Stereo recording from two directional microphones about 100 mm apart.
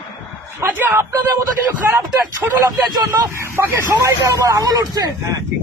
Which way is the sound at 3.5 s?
20° right (ahead or behind).